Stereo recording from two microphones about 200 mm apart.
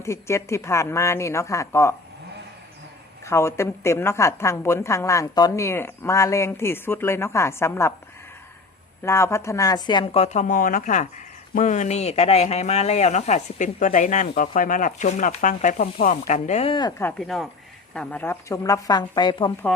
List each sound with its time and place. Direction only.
0.0 s a woman's voice: 15° left (ahead or behind)
3.2 s a woman's voice: 15° left (ahead or behind)
9.0 s a woman's voice: 15° left (ahead or behind)
17.0 s a woman's voice: 5° left (ahead or behind); by 19.5 s 20° left (ahead or behind)